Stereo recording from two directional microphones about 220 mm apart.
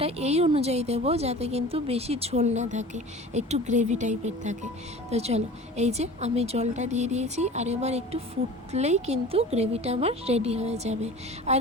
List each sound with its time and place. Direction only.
0.0 s a woman's voice: 30° right (ahead or behind)